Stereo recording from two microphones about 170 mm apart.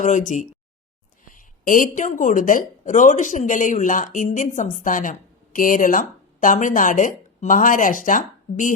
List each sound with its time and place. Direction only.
0.0 s speech: 45° left (ahead or behind)